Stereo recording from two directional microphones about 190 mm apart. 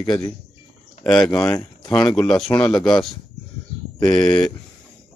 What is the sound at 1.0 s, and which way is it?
Speech, 5° left (ahead or behind).